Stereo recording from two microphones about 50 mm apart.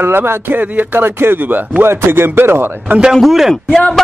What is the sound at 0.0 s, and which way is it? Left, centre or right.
Speech, right.